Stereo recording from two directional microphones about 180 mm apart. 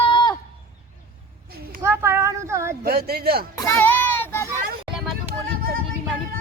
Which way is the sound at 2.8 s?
60° right (ahead or behind).